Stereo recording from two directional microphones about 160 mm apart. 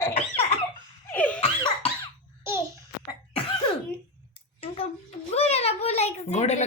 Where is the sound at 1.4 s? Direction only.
30° left (ahead or behind).